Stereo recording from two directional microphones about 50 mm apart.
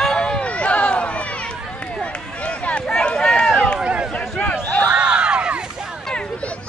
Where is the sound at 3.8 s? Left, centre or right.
Right.